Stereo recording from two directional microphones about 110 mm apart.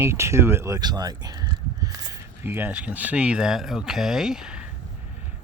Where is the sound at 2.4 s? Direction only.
20° right (ahead or behind).